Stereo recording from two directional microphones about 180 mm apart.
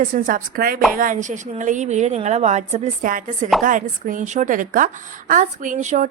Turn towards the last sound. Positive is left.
turn(degrees=-45)  # may be behind; listen again after turning